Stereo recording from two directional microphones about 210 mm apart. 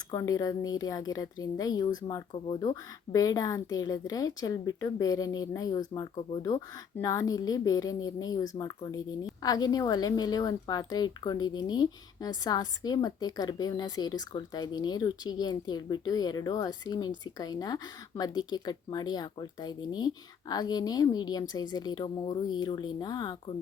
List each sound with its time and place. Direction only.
0.1 s a woman's voice: 15° left (ahead or behind)